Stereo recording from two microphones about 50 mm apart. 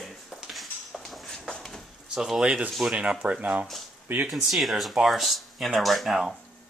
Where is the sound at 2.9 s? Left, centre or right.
Right.